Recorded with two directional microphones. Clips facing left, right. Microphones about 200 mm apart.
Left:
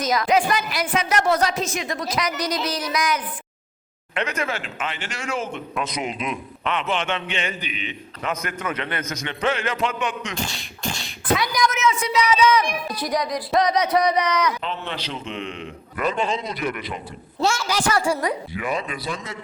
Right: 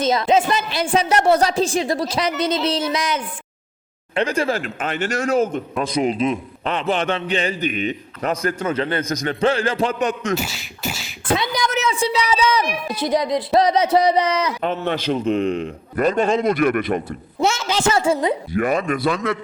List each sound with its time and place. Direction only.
0.0 s a woman's voice: 25° right (ahead or behind)
10.3 s beatboxing: 5° right (ahead or behind)
11.3 s a man's voice: 25° right (ahead or behind)
14.6 s a man's voice: 45° right (ahead or behind)
17.1 s a woman's voice: 20° right (ahead or behind)
18.5 s a man's voice: 50° right (ahead or behind)